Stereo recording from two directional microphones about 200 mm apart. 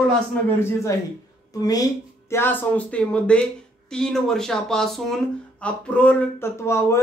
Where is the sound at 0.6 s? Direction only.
10° left (ahead or behind).